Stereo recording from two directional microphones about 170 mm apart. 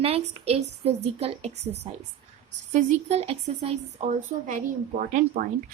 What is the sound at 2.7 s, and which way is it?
Speech, 40° right (ahead or behind).